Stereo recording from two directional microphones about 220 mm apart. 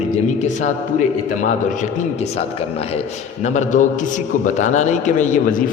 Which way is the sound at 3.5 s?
35° left (ahead or behind).